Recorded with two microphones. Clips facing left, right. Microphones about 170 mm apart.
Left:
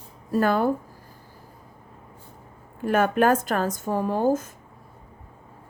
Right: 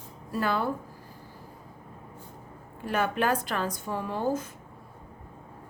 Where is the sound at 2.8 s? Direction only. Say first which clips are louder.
Left 7 dB; 50° left (ahead or behind).